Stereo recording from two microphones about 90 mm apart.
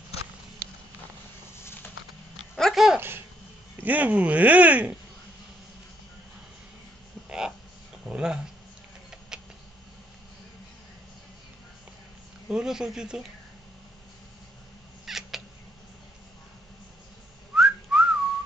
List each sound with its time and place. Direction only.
1.6 s a sound: 25° left (ahead or behind)
2.5 s dog: centre (ahead or behind)
3.8 s speech: 15° right (ahead or behind)
7.2 s a sound: 5° right (ahead or behind)
12.4 s speech: 5° right (ahead or behind)
15.0 s cat: 5° right (ahead or behind)
17.6 s whistling: 10° right (ahead or behind)